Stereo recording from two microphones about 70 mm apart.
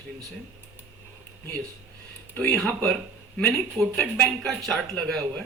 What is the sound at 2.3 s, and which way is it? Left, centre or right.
Speech, left.